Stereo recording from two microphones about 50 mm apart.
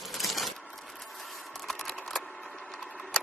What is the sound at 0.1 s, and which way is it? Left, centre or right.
Coin, centre.